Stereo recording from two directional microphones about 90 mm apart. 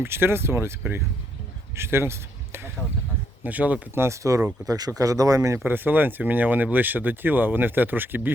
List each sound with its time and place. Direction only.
0.0 s speech: 25° right (ahead or behind)
1.7 s speech: 30° right (ahead or behind)
3.4 s speech: 15° right (ahead or behind)
4.0 s speech: 35° right (ahead or behind)
5.6 s speech: 20° right (ahead or behind)